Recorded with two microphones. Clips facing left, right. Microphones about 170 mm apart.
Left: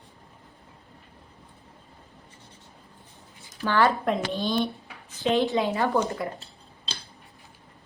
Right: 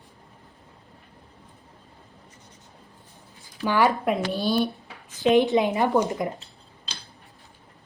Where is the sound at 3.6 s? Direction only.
15° right (ahead or behind).